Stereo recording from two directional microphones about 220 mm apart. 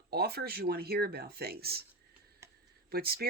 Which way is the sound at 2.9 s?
45° right (ahead or behind).